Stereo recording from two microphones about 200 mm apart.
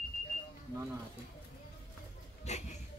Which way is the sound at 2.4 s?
35° left (ahead or behind).